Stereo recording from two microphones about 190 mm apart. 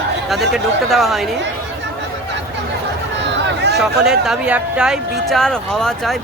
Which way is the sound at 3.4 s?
60° right (ahead or behind).